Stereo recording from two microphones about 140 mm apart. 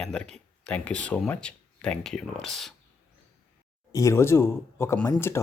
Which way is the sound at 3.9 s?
20° left (ahead or behind).